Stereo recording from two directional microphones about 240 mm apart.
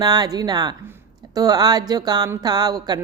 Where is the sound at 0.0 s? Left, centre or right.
Centre.